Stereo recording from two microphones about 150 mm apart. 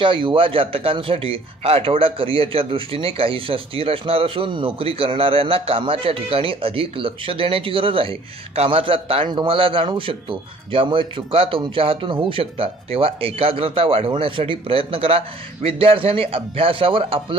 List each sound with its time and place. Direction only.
0.0 s a man's voice: 35° right (ahead or behind)